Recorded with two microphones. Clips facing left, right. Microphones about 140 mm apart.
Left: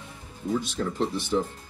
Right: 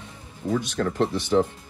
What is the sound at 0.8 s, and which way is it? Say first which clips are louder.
Speech: right 4 dB; 70° right (ahead or behind).